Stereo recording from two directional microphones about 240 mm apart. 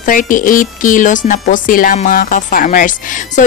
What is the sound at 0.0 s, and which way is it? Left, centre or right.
Speech, left.